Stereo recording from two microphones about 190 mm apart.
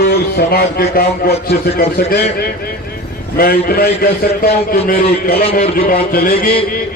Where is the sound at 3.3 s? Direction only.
55° left (ahead or behind).